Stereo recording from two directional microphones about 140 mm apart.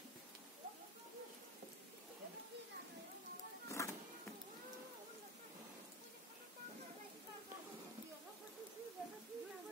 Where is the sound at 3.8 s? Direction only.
20° left (ahead or behind).